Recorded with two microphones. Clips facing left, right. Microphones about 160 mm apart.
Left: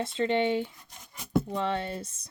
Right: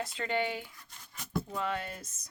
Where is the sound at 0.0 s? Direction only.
25° left (ahead or behind).